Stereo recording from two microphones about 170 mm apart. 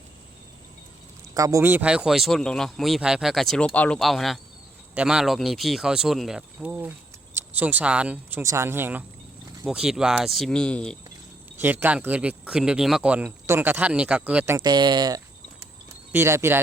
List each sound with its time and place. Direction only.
1.3 s speech: 20° right (ahead or behind); by 10.9 s 5° left (ahead or behind)
11.6 s speech: 10° right (ahead or behind)
14.6 s speech: 25° right (ahead or behind)